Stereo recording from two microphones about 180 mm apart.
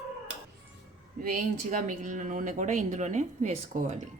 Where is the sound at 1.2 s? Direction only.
50° right (ahead or behind).